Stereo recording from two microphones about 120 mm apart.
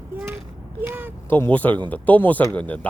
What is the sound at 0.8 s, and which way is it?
Speech, 15° right (ahead or behind).